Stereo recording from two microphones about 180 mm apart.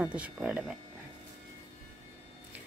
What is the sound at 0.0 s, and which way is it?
Speech, 5° right (ahead or behind).